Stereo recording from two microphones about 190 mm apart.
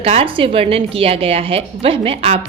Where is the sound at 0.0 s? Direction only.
30° right (ahead or behind).